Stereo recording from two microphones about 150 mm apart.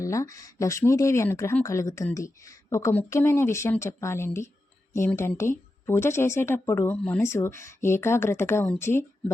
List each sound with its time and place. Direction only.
0.0 s speech: 20° left (ahead or behind)